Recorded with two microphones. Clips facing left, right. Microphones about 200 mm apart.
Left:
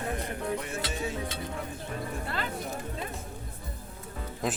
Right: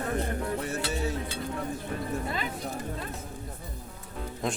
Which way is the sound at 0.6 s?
40° right (ahead or behind).